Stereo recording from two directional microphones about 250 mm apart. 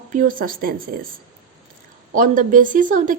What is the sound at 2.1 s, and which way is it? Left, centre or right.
A woman's voice, right.